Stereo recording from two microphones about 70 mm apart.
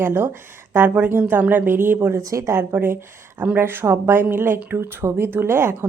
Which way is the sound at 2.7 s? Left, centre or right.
Right.